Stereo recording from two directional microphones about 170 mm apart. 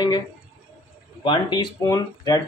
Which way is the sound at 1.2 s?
30° left (ahead or behind).